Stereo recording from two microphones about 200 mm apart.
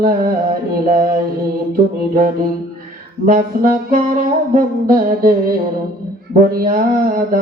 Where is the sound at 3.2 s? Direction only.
40° right (ahead or behind).